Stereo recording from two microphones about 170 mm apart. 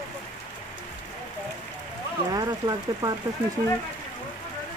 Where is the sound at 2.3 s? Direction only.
20° right (ahead or behind).